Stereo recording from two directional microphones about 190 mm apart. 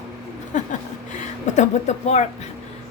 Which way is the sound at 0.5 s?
40° left (ahead or behind).